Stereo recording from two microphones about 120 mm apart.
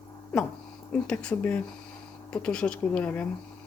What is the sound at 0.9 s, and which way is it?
Speech, 10° left (ahead or behind).